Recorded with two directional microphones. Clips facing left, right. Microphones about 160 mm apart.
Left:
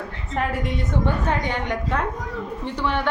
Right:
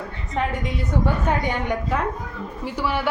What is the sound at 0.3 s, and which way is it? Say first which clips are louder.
A woman's voice: even; centre (ahead or behind).